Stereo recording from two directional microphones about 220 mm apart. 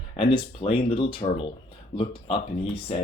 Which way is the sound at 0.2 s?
25° left (ahead or behind).